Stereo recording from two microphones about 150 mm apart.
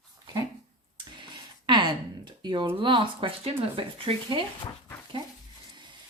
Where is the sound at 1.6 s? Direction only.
30° right (ahead or behind).